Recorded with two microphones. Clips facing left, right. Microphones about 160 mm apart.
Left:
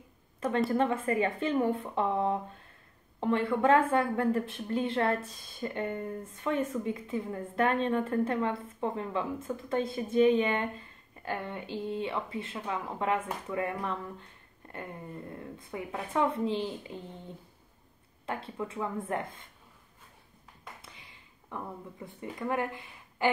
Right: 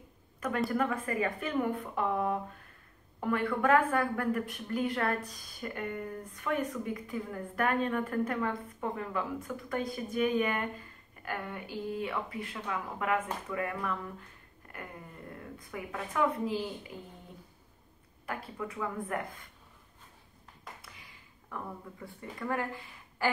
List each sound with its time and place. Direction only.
0.7 s a woman's voice: 25° left (ahead or behind)
18.2 s a woman's voice: 25° left (ahead or behind)
20.8 s speech: 25° left (ahead or behind)